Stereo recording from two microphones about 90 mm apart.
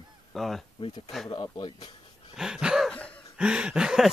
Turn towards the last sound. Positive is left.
turn(degrees=-5)  # may be behind; listen again after turning